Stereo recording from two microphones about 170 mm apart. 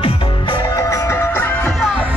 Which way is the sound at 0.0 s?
30° left (ahead or behind).